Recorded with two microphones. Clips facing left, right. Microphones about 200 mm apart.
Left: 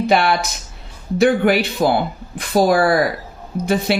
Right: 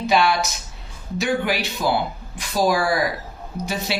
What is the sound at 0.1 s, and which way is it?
Speech, 55° left (ahead or behind).